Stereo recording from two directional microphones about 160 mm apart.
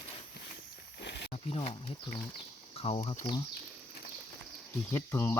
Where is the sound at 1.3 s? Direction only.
35° left (ahead or behind).